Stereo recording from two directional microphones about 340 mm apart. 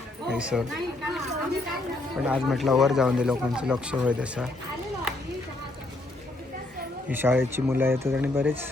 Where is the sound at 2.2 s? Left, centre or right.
Centre.